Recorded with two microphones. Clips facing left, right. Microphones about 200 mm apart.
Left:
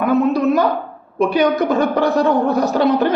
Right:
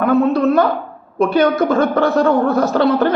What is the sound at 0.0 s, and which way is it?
A man's voice, 15° left (ahead or behind).